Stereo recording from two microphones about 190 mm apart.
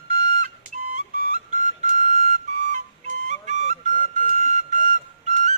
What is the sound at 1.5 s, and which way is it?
Flute, 40° right (ahead or behind).